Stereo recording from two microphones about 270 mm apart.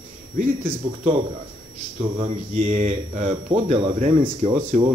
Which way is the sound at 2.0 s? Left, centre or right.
Centre.